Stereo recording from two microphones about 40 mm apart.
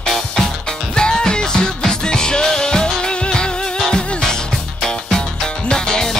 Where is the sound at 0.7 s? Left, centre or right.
Centre.